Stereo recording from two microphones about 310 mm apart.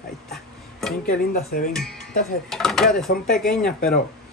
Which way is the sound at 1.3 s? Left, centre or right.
Left.